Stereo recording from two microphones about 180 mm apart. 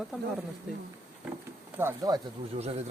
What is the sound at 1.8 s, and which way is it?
Speech, 15° right (ahead or behind).